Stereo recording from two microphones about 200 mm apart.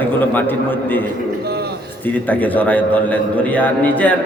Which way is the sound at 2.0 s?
10° left (ahead or behind).